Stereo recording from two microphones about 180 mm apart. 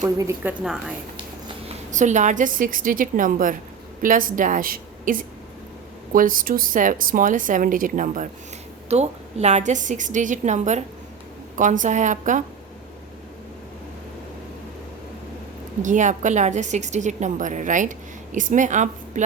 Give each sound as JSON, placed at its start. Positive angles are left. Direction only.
{"t": 0.0, "sound": "a woman's voice", "side_deg": -15}
{"t": 0.6, "sound": "a woman's voice", "side_deg": -5}
{"t": 1.9, "sound": "a woman's voice", "side_deg": -45}
{"t": 15.8, "sound": "a woman's voice", "side_deg": -45}